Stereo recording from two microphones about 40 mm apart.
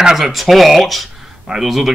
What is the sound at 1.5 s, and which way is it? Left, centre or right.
Speech, centre.